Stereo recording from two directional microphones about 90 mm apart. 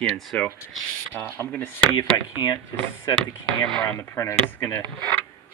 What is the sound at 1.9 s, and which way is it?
Speech, 55° left (ahead or behind).